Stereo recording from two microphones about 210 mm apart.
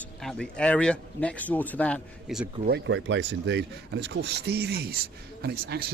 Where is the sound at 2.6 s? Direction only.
55° right (ahead or behind).